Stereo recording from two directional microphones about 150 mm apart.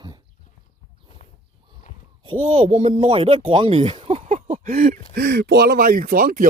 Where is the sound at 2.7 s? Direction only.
50° right (ahead or behind).